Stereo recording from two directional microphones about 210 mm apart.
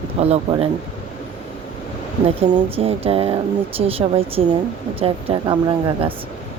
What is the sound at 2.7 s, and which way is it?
Speech, 30° right (ahead or behind).